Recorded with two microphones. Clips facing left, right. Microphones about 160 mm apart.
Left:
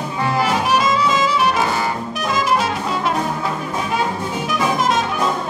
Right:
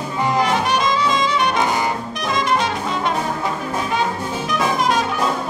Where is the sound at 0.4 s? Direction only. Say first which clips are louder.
Left 2 dB; 5° left (ahead or behind).